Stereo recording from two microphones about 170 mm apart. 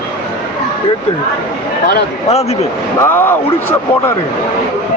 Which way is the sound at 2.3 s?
40° left (ahead or behind).